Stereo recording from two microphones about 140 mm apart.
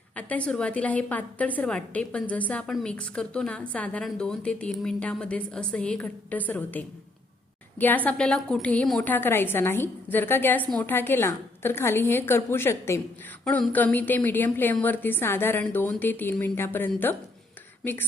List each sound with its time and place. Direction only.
0.2 s a woman's voice: 10° left (ahead or behind)